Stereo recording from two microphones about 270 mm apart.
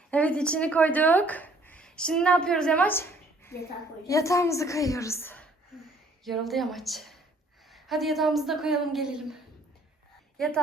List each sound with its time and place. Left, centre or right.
0.1 s a woman's voice: centre